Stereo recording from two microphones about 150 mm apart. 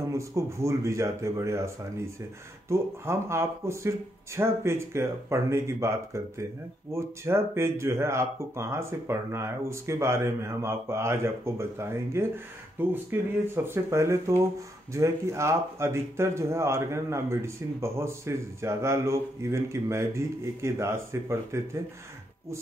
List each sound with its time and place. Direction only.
0.1 s a man's voice: 20° right (ahead or behind)